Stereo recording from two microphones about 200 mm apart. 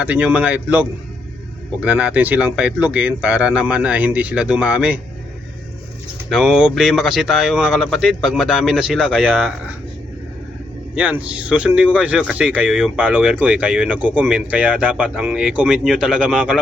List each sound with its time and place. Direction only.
0.0 s speech: 5° right (ahead or behind)
6.3 s speech: 5° right (ahead or behind)
10.9 s speech: 5° right (ahead or behind)